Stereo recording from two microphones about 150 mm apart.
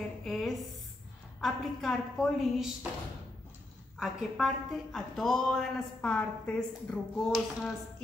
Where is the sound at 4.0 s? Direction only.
Centre (ahead or behind).